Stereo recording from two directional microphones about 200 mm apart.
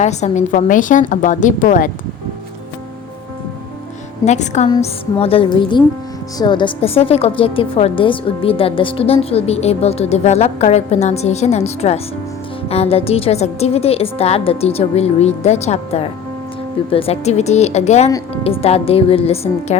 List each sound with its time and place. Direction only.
0.0 s a woman's voice: 35° left (ahead or behind)
4.3 s a woman's voice: 35° left (ahead or behind)